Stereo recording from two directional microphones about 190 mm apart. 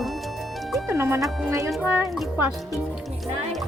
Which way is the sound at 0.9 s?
15° right (ahead or behind).